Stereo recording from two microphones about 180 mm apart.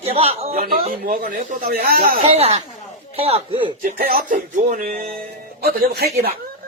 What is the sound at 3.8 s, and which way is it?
Speech, 55° right (ahead or behind).